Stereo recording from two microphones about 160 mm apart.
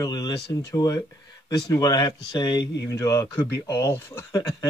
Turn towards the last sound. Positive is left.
turn(degrees=15)  # may be behind; listen again after turning